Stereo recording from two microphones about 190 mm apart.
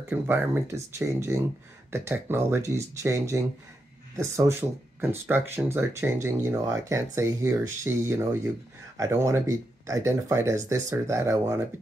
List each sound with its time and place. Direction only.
0.1 s speech: 10° right (ahead or behind)